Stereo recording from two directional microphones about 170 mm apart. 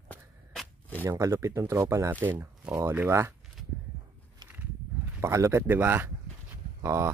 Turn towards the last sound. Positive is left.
turn(degrees=-15)  # may be behind; listen again after turning